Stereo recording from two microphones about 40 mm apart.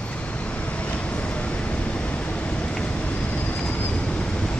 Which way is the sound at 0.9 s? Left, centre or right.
Left.